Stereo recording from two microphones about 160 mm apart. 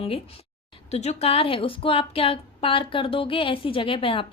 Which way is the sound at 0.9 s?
40° left (ahead or behind).